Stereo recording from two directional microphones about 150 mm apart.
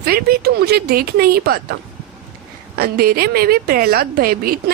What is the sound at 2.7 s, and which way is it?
A woman's voice, 90° right.